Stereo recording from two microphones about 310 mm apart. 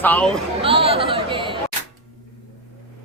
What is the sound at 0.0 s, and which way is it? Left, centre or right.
Speech, centre.